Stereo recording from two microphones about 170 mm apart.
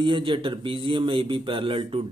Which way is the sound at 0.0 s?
30° right (ahead or behind).